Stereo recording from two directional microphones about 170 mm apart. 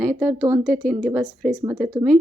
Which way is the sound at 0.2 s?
15° right (ahead or behind).